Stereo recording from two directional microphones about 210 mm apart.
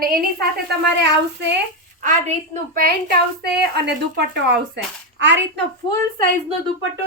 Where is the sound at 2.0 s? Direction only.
35° right (ahead or behind); by 5.6 s 55° right (ahead or behind).